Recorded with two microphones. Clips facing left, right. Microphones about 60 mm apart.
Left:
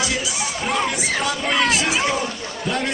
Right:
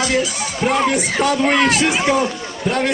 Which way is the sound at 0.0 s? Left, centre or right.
Right.